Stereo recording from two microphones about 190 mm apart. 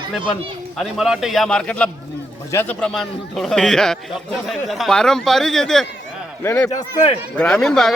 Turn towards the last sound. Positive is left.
turn(degrees=5)  # may be behind; listen again after turning